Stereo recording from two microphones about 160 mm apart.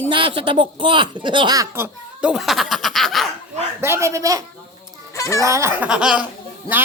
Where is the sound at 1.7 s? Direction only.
10° right (ahead or behind).